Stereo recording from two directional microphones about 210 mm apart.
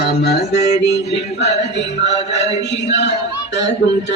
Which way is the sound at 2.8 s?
55° left (ahead or behind).